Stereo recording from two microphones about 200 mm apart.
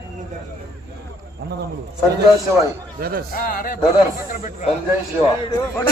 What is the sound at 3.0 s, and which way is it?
Speech, 50° right (ahead or behind).